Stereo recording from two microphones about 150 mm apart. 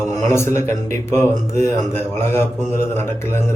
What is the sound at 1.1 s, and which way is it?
Speech, 50° right (ahead or behind).